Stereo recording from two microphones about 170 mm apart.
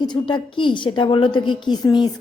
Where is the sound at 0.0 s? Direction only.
25° left (ahead or behind).